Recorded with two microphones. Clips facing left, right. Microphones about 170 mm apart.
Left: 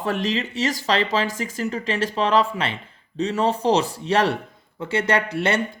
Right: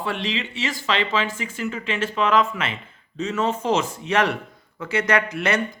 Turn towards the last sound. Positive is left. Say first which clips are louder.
# even
turn(degrees=30)  # may be behind; listen again after turning